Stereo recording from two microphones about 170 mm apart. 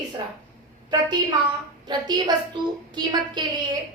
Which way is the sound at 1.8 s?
25° right (ahead or behind).